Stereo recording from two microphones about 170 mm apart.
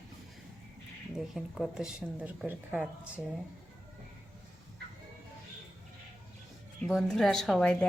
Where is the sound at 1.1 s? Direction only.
Centre (ahead or behind).